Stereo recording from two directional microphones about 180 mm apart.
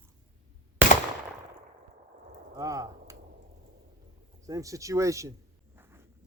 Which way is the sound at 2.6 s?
20° right (ahead or behind).